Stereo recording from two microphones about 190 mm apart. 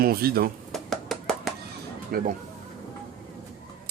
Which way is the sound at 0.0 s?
55° right (ahead or behind).